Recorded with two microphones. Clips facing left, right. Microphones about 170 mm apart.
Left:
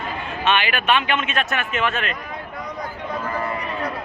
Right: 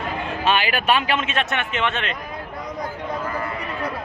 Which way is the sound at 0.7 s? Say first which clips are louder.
Even; 35° right (ahead or behind).